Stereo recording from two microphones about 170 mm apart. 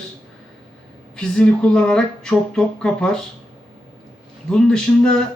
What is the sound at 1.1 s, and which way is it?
A man's voice, 5° left (ahead or behind).